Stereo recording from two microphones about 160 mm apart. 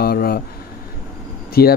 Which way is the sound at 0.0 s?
70° left (ahead or behind).